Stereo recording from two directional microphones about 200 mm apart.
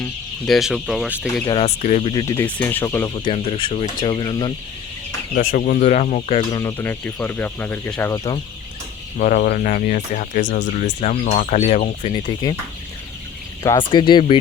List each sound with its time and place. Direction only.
0.0 s speech: centre (ahead or behind)
1.5 s speech: 30° left (ahead or behind)
2.1 s speech: 15° left (ahead or behind)
3.2 s speech: 30° left (ahead or behind)
5.3 s speech: 45° left (ahead or behind)
6.6 s speech: 15° left (ahead or behind)
9.1 s speech: 40° left (ahead or behind); by 12.5 s 20° left (ahead or behind)
13.6 s speech: 20° left (ahead or behind)